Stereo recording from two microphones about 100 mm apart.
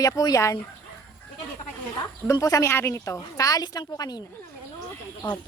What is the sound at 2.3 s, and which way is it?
A woman's voice, 35° left (ahead or behind).